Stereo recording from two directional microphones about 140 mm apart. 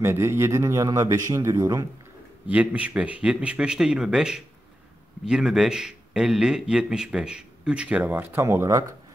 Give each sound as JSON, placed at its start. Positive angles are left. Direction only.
{"t": 0.0, "sound": "a man's voice", "side_deg": -20}
{"t": 2.4, "sound": "a man's voice", "side_deg": -10}